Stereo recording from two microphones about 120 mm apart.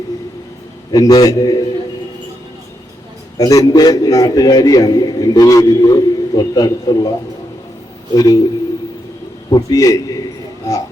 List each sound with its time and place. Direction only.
0.9 s a man's voice: 30° left (ahead or behind)
3.3 s a man's voice: 30° left (ahead or behind)
8.1 s a man's voice: 30° left (ahead or behind)
9.5 s a man's voice: 30° left (ahead or behind)